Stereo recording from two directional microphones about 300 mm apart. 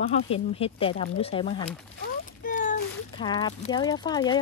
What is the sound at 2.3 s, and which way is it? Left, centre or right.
Splash, left.